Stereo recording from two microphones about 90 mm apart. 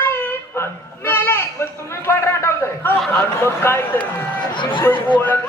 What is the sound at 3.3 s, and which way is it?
Speech, 30° left (ahead or behind).